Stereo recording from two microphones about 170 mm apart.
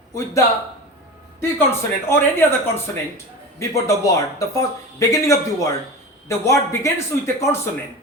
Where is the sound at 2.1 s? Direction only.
15° left (ahead or behind).